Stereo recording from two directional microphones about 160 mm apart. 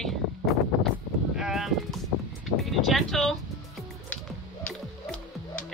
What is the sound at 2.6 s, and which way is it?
Speech, centre (ahead or behind).